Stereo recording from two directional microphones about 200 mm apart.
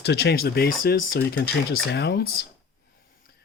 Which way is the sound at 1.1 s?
65° left (ahead or behind).